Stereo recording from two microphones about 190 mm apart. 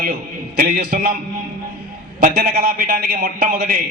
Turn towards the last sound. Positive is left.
turn(degrees=-45)  # may be behind; listen again after turning